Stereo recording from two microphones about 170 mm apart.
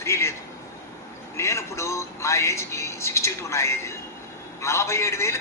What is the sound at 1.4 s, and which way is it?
Speech, 15° left (ahead or behind).